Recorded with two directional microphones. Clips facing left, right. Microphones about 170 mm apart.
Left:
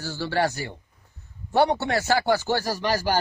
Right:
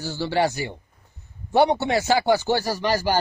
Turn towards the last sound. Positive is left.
turn(degrees=-15)  # may be behind; listen again after turning